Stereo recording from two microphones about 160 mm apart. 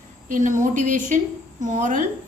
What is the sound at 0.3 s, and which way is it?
A woman's voice, 55° right (ahead or behind).